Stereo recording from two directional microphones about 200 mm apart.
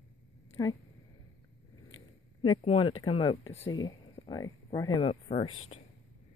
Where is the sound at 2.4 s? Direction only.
25° left (ahead or behind).